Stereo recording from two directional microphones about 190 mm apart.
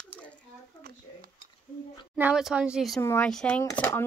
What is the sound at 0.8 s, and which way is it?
Stir, 50° right (ahead or behind).